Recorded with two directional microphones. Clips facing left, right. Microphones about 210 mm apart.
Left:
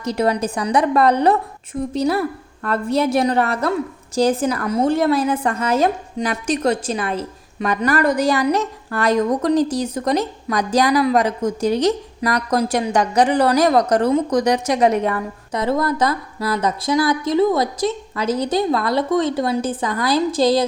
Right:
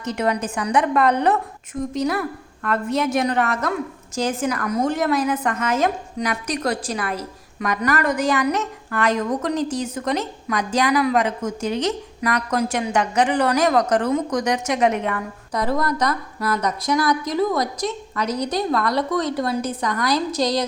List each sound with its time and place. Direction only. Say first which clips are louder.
0.0 s a woman's voice: left 4 dB; 35° left (ahead or behind)